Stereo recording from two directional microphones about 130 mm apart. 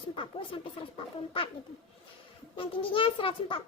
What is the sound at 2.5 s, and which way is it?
A child's voice, 40° left (ahead or behind).